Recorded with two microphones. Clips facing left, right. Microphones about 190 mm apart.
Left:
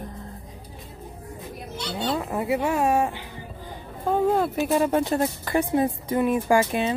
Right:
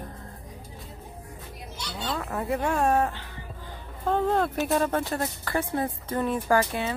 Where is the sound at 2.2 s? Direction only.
15° left (ahead or behind).